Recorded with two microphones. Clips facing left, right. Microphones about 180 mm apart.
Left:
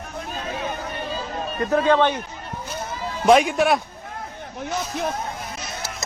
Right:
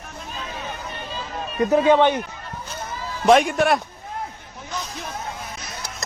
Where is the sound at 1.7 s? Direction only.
15° right (ahead or behind).